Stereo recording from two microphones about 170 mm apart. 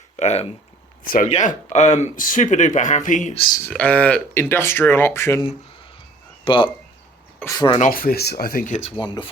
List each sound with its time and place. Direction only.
0.2 s speech: 40° left (ahead or behind)
1.0 s speech: 55° left (ahead or behind)
1.3 s speech: 45° left (ahead or behind)
3.3 s speech: 30° left (ahead or behind)
3.6 s speech: 10° left (ahead or behind)
6.4 s speech: 30° left (ahead or behind)
7.3 s speech: 20° left (ahead or behind)
7.8 s speech: 60° left (ahead or behind)
9.0 s speech: 25° left (ahead or behind)